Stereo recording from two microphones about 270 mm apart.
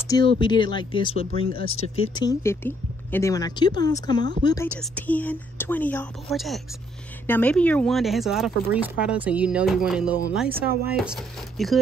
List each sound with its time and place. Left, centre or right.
0.0 s speech: centre